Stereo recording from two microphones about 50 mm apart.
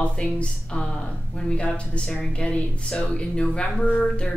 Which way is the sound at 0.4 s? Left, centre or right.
Centre.